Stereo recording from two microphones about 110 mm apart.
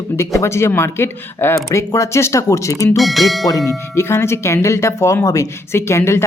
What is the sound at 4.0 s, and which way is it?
Speech, 25° left (ahead or behind).